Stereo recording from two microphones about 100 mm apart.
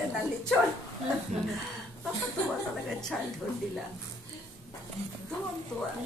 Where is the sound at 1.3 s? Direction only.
90° right.